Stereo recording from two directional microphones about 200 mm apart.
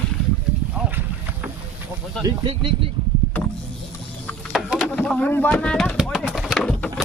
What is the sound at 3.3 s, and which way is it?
Power windows, 10° left (ahead or behind).